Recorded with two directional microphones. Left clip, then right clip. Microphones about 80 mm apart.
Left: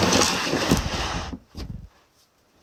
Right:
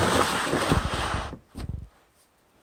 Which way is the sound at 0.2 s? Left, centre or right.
Left.